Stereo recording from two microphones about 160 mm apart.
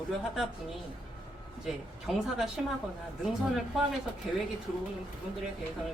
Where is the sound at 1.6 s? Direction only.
Centre (ahead or behind).